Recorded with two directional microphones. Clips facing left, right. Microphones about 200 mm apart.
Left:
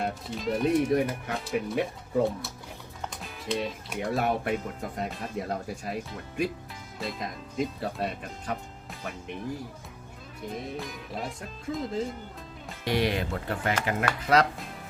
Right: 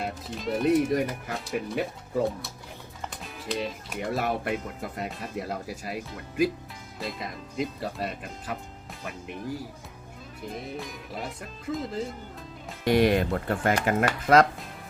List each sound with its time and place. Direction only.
0.0 s speech: centre (ahead or behind)
10.5 s speech: centre (ahead or behind)
12.8 s speech: 50° right (ahead or behind)